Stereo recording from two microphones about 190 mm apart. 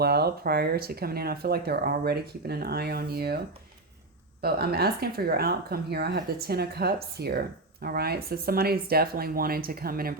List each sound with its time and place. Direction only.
0.0 s speech: 55° right (ahead or behind)